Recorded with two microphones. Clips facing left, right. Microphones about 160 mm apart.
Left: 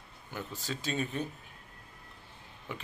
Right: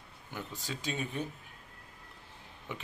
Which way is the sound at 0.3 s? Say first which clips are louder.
Left 2 dB; 15° right (ahead or behind).